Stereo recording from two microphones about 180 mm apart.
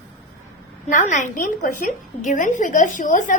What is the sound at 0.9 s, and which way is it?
A woman's voice, 45° left (ahead or behind).